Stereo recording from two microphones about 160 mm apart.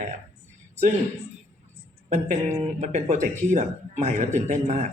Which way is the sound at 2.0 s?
45° right (ahead or behind).